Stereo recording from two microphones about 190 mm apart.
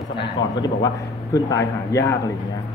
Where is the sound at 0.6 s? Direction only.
20° left (ahead or behind).